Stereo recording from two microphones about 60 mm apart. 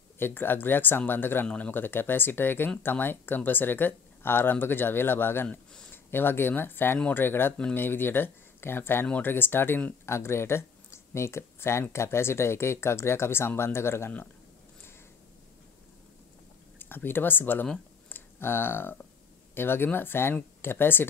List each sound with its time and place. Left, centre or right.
0.2 s speech: left
10.0 s speech: left
16.7 s speech: left